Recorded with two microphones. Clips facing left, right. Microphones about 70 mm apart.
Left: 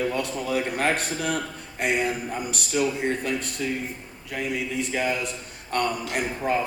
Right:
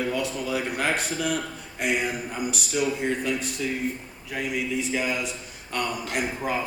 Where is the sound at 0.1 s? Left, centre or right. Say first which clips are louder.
Left 1 dB; left.